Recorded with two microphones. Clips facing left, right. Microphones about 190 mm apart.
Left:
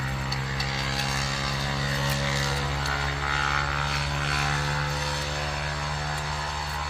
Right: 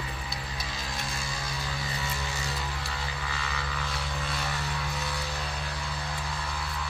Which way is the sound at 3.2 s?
65° left (ahead or behind).